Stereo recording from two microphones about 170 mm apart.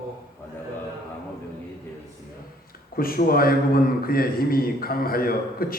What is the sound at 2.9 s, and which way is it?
A man's voice, 60° left (ahead or behind).